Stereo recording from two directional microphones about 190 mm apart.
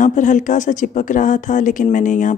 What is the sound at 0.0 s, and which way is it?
Speech, 40° left (ahead or behind).